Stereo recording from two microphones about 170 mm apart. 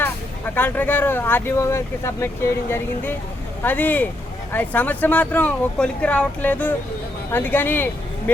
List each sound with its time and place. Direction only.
0.5 s speech: 10° left (ahead or behind)